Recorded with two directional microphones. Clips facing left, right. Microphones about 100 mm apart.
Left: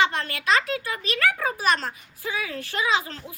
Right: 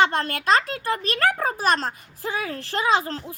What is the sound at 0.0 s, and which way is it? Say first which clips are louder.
A child's voice: right 3 dB; 40° right (ahead or behind).